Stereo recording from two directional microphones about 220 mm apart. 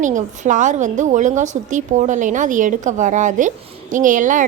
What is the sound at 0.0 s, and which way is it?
A woman's voice, 35° right (ahead or behind).